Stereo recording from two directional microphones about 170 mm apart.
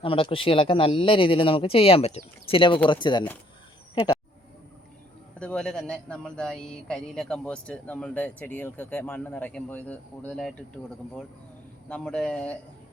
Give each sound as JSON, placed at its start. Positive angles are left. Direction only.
{"t": 0.0, "sound": "speech", "side_deg": 30}
{"t": 3.9, "sound": "a sound", "side_deg": 25}
{"t": 5.4, "sound": "a man's voice", "side_deg": 5}